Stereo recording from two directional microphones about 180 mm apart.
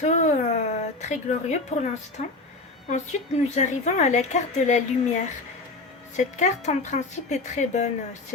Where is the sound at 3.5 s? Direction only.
40° left (ahead or behind).